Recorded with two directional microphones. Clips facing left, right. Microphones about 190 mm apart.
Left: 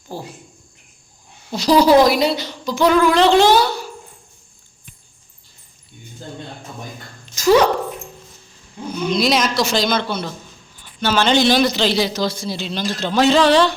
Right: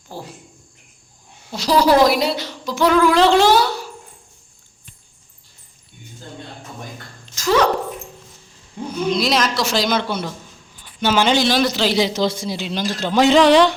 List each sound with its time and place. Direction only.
0.1 s a woman's voice: centre (ahead or behind)
1.5 s a woman's voice: 5° right (ahead or behind)
7.3 s a sound: 10° left (ahead or behind)
9.0 s a woman's voice: centre (ahead or behind)
11.3 s a woman's voice: centre (ahead or behind)
11.9 s a woman's voice: 20° right (ahead or behind)